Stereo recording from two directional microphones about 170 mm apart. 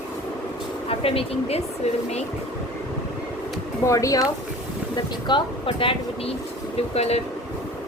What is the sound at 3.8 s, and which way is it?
Speech, 20° left (ahead or behind).